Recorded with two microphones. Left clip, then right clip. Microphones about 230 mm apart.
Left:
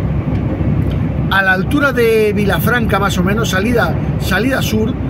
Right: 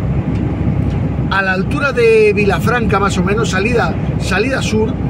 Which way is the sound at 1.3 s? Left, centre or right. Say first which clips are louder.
Left 3 dB; centre.